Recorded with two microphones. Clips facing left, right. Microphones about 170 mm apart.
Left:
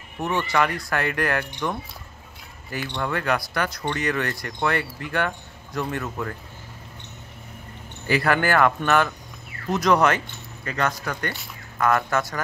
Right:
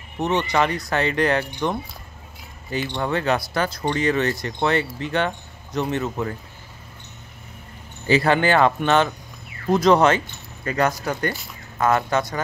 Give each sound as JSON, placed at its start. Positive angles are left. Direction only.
{"t": 0.2, "sound": "speech", "side_deg": -20}
{"t": 8.1, "sound": "speech", "side_deg": -25}